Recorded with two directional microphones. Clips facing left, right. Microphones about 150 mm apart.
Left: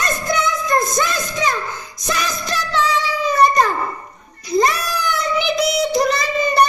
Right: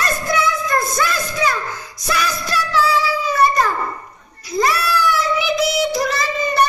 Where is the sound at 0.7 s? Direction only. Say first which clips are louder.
Left 1 dB; 15° left (ahead or behind).